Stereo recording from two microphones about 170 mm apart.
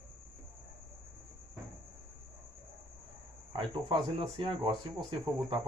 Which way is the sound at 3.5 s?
30° right (ahead or behind).